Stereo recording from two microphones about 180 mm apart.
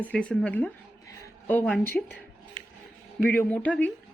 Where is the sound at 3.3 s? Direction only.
10° left (ahead or behind).